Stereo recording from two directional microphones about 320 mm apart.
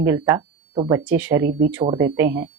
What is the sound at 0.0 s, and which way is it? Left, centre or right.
Speech, centre.